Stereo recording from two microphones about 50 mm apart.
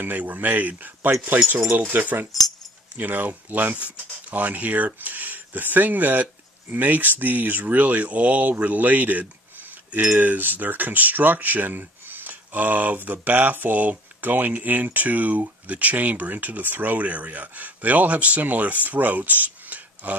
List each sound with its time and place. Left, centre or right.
0.2 s speech: right